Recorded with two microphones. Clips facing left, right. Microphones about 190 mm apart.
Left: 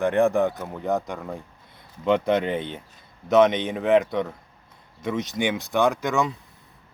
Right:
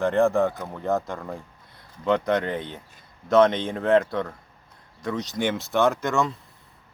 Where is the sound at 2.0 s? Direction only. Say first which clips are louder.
Left 2 dB; 20° left (ahead or behind).